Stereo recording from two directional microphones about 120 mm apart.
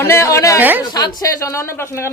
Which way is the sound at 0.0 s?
20° left (ahead or behind).